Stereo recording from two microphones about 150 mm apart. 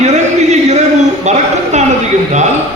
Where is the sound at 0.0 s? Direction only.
50° right (ahead or behind).